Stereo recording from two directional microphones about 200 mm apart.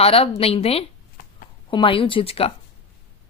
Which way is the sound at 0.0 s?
30° left (ahead or behind).